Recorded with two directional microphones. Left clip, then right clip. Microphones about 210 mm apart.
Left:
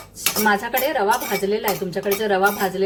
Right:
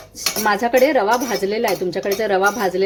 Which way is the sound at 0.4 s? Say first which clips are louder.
Right 5 dB; 35° right (ahead or behind).